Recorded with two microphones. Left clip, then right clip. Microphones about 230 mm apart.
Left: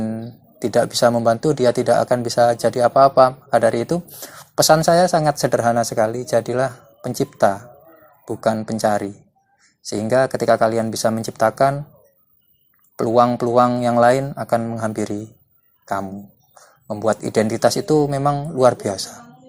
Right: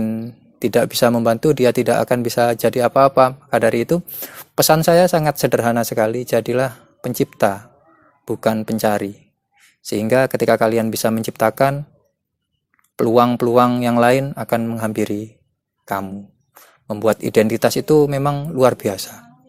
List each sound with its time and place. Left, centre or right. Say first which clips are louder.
0.0 s speech: right 2 dB; right
13.0 s speech: right 1 dB; right